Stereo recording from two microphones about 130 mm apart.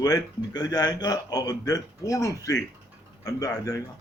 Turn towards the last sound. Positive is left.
turn(degrees=25)  # may be behind; listen again after turning